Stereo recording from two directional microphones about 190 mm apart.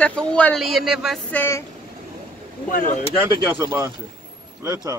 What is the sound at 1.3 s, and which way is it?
Speech, 10° left (ahead or behind).